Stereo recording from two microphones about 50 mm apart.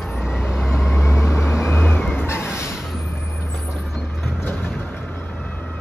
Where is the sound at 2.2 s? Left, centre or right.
Left.